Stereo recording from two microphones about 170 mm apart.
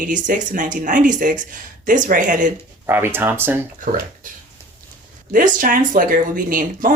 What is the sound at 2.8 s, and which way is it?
Speech, 15° right (ahead or behind).